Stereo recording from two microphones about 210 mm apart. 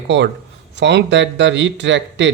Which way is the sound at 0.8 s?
55° right (ahead or behind).